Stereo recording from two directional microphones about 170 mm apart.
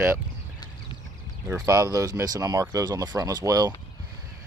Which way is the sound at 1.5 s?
20° right (ahead or behind).